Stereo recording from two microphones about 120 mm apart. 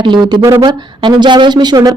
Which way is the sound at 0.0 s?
40° right (ahead or behind).